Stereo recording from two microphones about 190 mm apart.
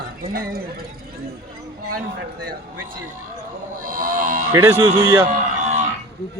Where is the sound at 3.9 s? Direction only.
45° right (ahead or behind).